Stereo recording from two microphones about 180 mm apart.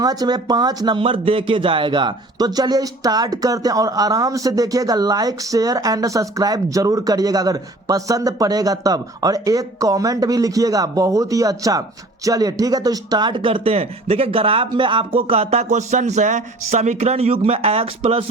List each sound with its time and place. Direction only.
0.0 s speech: 20° right (ahead or behind)